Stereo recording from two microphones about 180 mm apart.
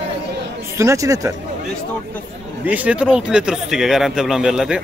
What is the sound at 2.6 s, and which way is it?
Speech, 10° right (ahead or behind).